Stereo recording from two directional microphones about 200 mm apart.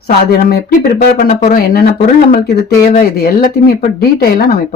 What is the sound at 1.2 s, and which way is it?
Speech, 40° left (ahead or behind).